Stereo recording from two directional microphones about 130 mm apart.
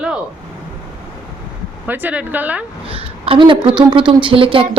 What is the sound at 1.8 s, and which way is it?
Speech, 15° right (ahead or behind).